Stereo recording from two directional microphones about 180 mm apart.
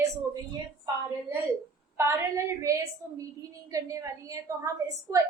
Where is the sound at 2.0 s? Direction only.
15° right (ahead or behind).